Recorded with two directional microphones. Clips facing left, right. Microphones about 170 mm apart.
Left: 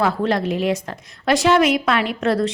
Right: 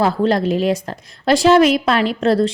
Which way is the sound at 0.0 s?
35° right (ahead or behind).